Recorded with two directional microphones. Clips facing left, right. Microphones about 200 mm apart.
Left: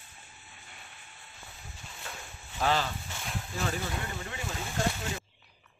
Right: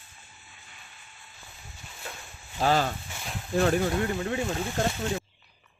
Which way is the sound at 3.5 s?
55° right (ahead or behind).